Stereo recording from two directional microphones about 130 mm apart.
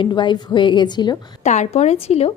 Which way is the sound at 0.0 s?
35° left (ahead or behind).